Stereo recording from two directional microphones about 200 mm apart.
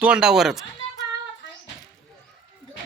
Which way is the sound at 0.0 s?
5° right (ahead or behind).